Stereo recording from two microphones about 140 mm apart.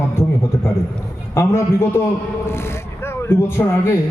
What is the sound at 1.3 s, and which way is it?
A man's voice, 20° left (ahead or behind).